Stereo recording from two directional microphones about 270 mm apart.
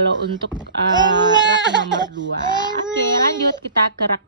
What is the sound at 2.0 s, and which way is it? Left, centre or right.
Speech, right.